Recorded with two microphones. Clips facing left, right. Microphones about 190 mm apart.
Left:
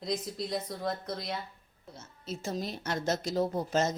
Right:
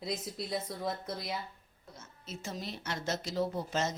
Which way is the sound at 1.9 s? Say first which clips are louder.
Left 6 dB; 35° left (ahead or behind).